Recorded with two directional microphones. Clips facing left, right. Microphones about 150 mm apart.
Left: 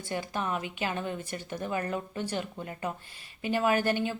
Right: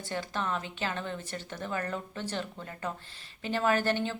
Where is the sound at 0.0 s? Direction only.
15° left (ahead or behind).